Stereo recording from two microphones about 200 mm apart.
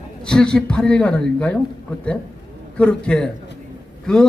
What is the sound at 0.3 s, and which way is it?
A man's voice, 5° left (ahead or behind).